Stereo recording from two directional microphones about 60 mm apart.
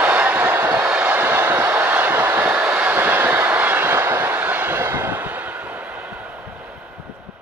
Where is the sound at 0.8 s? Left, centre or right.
Right.